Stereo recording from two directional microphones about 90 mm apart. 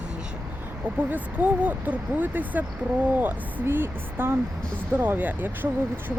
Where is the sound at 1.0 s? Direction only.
15° right (ahead or behind).